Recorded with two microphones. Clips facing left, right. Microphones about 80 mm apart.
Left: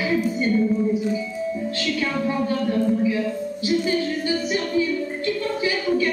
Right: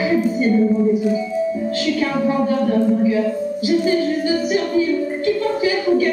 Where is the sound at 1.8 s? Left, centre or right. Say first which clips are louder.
Right 5 dB; centre.